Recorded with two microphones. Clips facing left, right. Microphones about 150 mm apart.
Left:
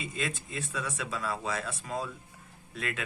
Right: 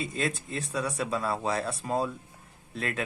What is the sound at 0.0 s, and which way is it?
Speech, 40° right (ahead or behind).